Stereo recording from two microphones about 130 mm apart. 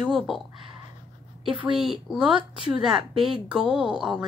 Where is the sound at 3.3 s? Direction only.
5° right (ahead or behind).